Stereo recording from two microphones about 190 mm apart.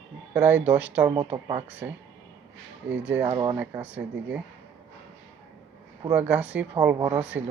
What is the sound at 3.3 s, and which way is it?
Speech, 25° right (ahead or behind).